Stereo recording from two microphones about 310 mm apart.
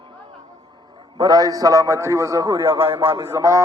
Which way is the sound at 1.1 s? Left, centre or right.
Centre.